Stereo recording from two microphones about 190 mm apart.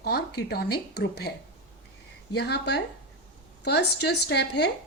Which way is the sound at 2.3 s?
60° left (ahead or behind).